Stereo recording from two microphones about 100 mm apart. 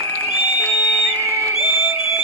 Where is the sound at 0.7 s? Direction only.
30° left (ahead or behind).